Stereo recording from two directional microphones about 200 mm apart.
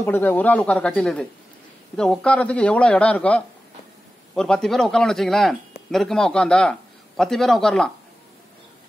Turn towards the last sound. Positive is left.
turn(degrees=0)  # may be behind; listen again after turning